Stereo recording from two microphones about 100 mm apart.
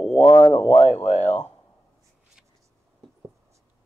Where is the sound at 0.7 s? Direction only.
90° left.